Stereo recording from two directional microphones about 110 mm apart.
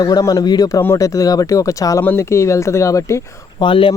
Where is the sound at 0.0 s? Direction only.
35° left (ahead or behind).